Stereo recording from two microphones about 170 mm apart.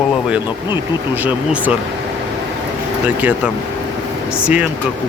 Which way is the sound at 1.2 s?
10° right (ahead or behind).